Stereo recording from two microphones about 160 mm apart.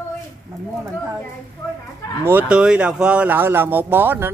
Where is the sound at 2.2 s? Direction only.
10° right (ahead or behind).